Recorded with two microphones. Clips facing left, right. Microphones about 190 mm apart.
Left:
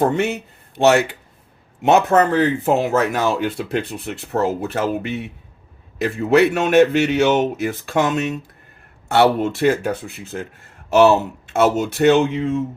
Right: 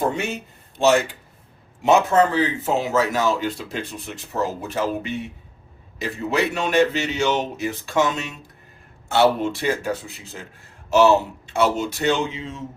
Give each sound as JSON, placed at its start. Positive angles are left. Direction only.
{"t": 0.1, "sound": "speech", "side_deg": 60}